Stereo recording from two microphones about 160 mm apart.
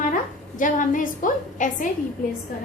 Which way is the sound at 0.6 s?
55° left (ahead or behind).